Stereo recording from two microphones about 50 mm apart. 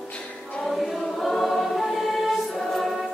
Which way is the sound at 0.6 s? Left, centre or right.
Centre.